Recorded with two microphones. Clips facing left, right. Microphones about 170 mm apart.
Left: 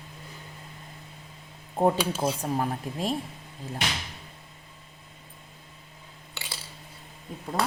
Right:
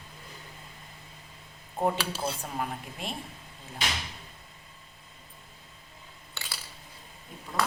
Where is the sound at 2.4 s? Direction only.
35° left (ahead or behind).